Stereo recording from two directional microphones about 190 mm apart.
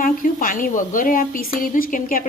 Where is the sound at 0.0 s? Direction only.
45° left (ahead or behind).